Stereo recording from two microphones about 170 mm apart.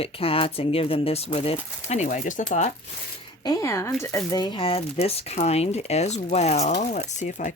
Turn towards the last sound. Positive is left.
turn(degrees=45)  # may be behind; listen again after turning